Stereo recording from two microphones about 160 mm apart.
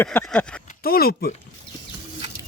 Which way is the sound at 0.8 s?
70° left (ahead or behind).